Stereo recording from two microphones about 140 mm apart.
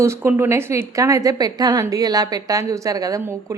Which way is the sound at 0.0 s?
20° right (ahead or behind).